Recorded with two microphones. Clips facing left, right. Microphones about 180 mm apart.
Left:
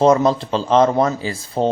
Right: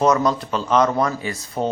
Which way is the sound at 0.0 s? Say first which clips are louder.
Left 4 dB; 30° left (ahead or behind).